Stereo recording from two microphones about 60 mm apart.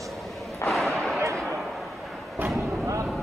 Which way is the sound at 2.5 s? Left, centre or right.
Centre.